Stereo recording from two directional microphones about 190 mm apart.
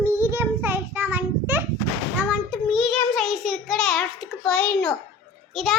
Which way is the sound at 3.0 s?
Centre (ahead or behind).